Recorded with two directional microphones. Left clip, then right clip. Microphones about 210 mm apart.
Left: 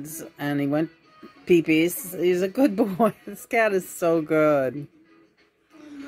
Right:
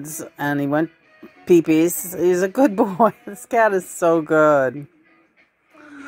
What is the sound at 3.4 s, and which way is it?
Speech, 15° right (ahead or behind).